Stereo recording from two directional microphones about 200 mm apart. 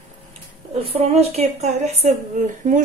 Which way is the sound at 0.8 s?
30° right (ahead or behind).